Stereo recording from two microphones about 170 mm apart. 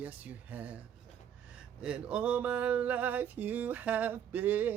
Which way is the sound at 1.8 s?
5° right (ahead or behind).